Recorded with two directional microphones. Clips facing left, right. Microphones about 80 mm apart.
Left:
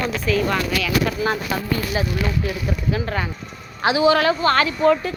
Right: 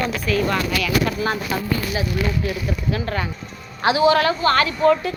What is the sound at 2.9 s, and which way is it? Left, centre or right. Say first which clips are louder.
Speech: left 1 dB; centre.